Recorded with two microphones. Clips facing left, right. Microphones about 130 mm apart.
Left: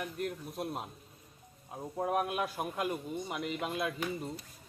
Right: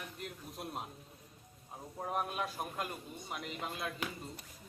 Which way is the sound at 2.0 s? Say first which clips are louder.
Left 5 dB; 65° left (ahead or behind).